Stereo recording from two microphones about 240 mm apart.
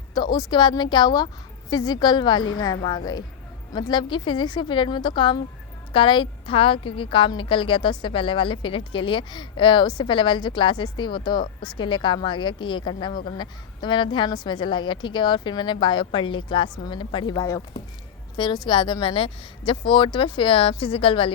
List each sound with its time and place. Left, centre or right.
0.1 s a woman's voice: centre